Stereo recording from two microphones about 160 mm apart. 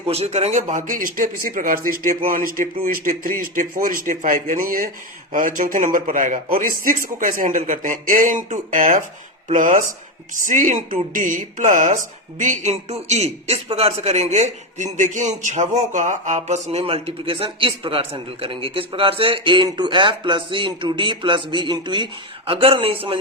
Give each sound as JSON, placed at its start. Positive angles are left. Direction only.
{"t": 0.1, "sound": "a man's voice", "side_deg": -40}